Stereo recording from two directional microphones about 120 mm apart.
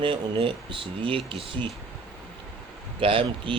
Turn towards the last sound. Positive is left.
turn(degrees=-45)  # may be behind; listen again after turning